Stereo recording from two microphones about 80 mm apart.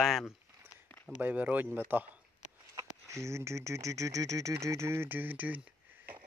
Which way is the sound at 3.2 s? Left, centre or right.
Right.